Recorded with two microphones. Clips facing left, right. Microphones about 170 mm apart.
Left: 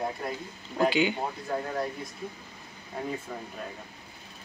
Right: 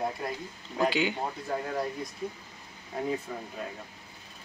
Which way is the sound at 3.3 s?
Centre (ahead or behind).